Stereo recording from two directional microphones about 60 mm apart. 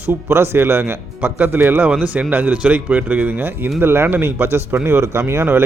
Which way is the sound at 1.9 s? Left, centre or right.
Right.